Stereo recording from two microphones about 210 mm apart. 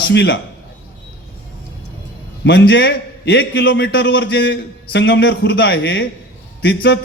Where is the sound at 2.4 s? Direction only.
55° left (ahead or behind).